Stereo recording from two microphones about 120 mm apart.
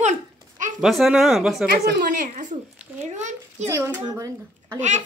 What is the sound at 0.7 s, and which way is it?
Speech, centre (ahead or behind).